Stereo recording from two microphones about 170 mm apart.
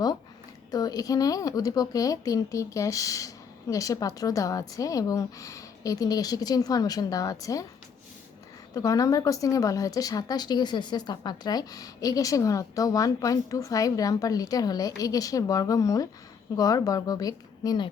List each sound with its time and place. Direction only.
0.7 s a woman's voice: 20° left (ahead or behind)
8.7 s a woman's voice: 20° left (ahead or behind)